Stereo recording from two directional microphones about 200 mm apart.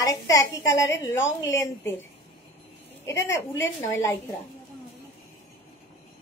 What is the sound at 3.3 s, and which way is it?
Speech, 10° left (ahead or behind).